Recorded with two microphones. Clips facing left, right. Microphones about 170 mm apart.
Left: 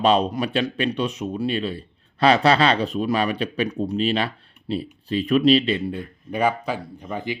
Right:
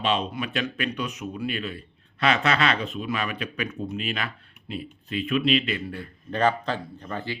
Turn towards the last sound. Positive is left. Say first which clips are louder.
# left 4 dB
turn(degrees=15)  # may be behind; listen again after turning